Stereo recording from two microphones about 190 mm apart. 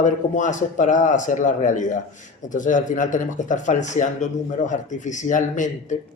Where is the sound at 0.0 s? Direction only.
40° left (ahead or behind).